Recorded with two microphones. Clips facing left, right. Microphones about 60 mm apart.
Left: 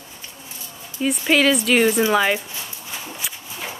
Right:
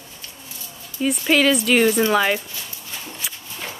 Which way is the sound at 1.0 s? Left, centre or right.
Centre.